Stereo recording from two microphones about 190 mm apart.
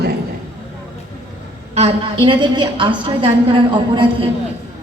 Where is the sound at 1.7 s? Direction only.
30° right (ahead or behind).